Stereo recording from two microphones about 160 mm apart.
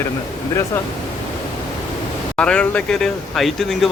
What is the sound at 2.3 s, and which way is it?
Speech, 5° left (ahead or behind).